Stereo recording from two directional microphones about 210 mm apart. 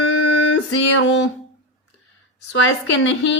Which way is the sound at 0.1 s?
85° left.